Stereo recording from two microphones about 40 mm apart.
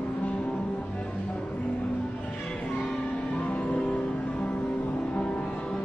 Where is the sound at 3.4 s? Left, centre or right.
Left.